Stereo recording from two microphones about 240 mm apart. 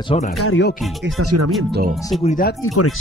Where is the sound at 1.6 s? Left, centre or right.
Right.